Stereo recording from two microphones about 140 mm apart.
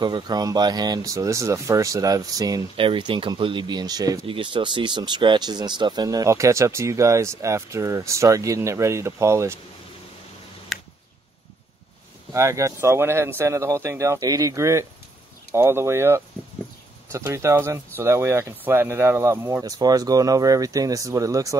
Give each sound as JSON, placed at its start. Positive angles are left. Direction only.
{"t": 0.0, "sound": "speech", "side_deg": -30}
{"t": 2.7, "sound": "speech", "side_deg": -40}
{"t": 10.7, "sound": "a sound", "side_deg": 0}
{"t": 12.3, "sound": "speech", "side_deg": -20}